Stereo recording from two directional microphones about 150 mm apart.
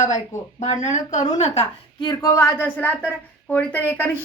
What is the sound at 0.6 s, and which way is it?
Speech, 50° left (ahead or behind).